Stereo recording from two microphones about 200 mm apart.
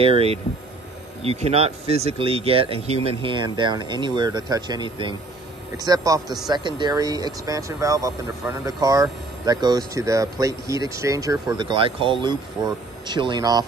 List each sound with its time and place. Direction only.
0.0 s speech: 30° right (ahead or behind)